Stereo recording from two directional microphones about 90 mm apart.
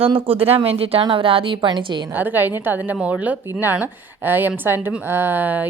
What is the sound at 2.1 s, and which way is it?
A woman's voice, 20° right (ahead or behind).